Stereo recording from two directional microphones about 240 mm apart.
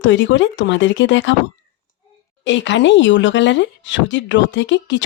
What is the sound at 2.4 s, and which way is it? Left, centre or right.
Speech, left.